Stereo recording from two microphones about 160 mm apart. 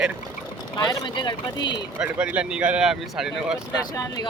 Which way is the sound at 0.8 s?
25° left (ahead or behind).